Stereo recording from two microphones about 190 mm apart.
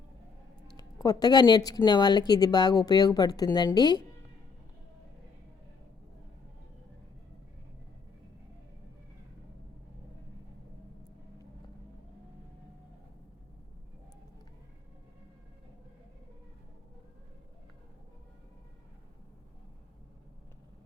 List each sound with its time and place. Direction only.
0.7 s speech: 20° left (ahead or behind)